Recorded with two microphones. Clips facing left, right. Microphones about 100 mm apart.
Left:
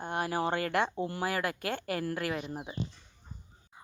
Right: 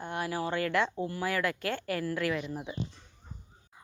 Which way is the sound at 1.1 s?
45° left (ahead or behind).